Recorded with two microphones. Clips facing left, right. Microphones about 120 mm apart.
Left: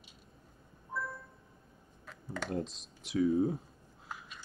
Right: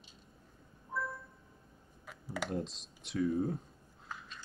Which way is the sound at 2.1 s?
10° right (ahead or behind).